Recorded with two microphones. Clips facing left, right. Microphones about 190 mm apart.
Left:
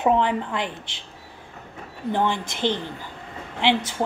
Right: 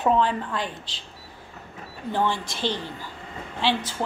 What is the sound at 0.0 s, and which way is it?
Speech, 15° left (ahead or behind).